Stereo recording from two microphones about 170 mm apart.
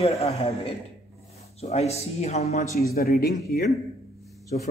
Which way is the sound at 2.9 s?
65° left (ahead or behind).